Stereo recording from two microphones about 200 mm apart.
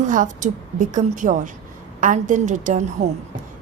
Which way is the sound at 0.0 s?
40° right (ahead or behind).